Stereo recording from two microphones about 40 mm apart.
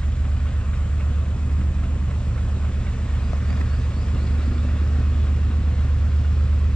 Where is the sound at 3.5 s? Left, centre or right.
Left.